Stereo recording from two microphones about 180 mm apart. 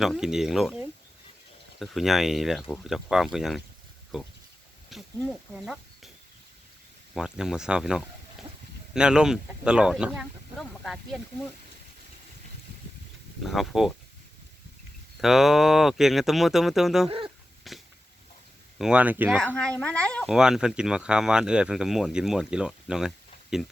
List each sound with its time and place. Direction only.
0.0 s speech: centre (ahead or behind)
7.1 s speech: 5° right (ahead or behind)
13.4 s speech: centre (ahead or behind)
15.2 s speech: centre (ahead or behind)
17.1 s speech: 30° right (ahead or behind)
17.7 s a sound: centre (ahead or behind)
18.8 s speech: 5° right (ahead or behind)
19.5 s speech: 5° left (ahead or behind)